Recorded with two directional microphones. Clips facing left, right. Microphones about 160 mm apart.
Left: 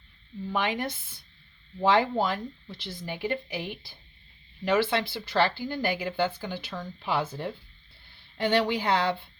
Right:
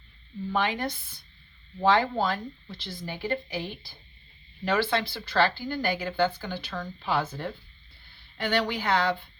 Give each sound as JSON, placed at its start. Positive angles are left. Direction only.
{"t": 0.5, "sound": "speech", "side_deg": 20}
{"t": 4.6, "sound": "speech", "side_deg": 20}